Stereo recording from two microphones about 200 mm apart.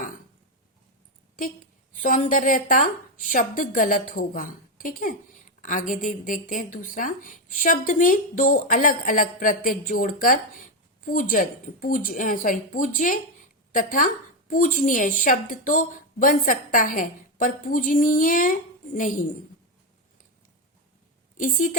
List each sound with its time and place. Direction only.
1.4 s speech: 40° left (ahead or behind)
21.3 s a woman's voice: 40° left (ahead or behind)